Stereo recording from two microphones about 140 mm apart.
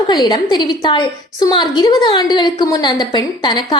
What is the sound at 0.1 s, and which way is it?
A woman's voice, 30° left (ahead or behind).